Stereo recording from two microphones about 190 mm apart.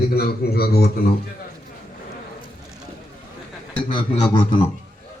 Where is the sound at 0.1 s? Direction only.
55° left (ahead or behind).